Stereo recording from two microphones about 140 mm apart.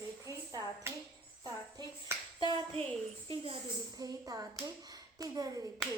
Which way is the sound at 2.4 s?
40° right (ahead or behind).